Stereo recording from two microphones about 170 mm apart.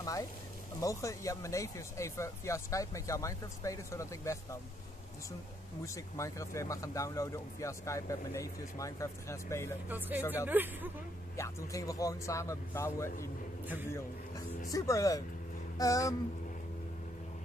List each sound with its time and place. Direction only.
0.0 s speech: 20° left (ahead or behind)
5.9 s speech: 15° left (ahead or behind)
9.8 s speech: 10° right (ahead or behind)
11.3 s speech: 15° left (ahead or behind)
14.7 s speech: 20° left (ahead or behind)